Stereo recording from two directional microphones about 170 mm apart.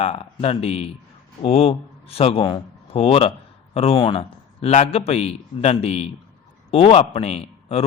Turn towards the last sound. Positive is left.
turn(degrees=40)  # may be behind; listen again after turning